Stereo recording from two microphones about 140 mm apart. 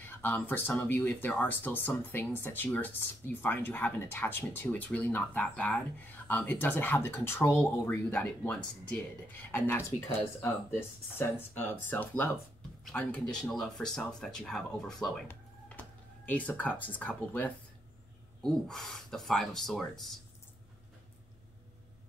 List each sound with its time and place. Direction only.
0.0 s speech: 15° left (ahead or behind)
15.2 s a sound: 10° left (ahead or behind)
18.4 s speech: 5° left (ahead or behind)